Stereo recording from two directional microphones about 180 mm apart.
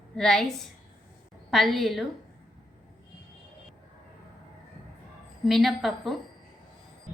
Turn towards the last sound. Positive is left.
turn(degrees=0)  # may be behind; listen again after turning